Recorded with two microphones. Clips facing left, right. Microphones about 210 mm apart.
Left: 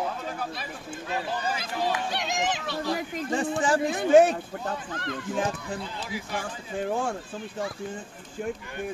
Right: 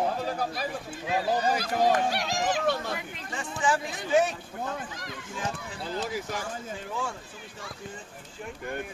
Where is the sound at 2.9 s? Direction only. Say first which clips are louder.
Left 9 dB; 35° left (ahead or behind).